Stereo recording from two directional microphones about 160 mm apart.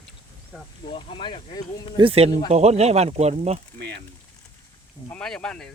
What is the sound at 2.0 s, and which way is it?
Speech, 35° right (ahead or behind).